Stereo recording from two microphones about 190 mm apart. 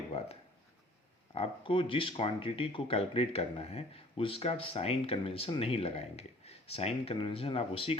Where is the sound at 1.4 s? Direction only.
25° left (ahead or behind).